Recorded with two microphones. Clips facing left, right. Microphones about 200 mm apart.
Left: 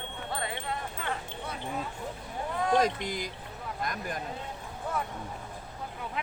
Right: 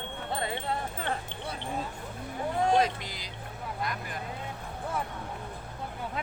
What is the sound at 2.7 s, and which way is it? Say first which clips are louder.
Speech: even; 45° left (ahead or behind).